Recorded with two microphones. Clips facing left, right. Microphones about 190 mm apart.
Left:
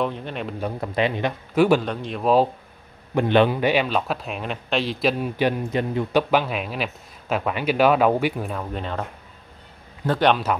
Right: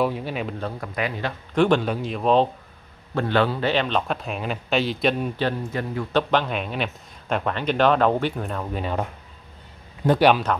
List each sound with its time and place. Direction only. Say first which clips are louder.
0.0 s speech: right 2 dB; 5° right (ahead or behind)
0.7 s speech: left 5 dB; 25° left (ahead or behind)
1.5 s speech: left 1 dB; 5° left (ahead or behind)
3.2 s speech: left 4 dB; 20° left (ahead or behind); by 5.3 s centre (ahead or behind)
5.4 s speech: left 3 dB; 20° left (ahead or behind)
6.1 s speech: left 1 dB; 5° left (ahead or behind)
10.0 s speech: right 2 dB; 10° right (ahead or behind)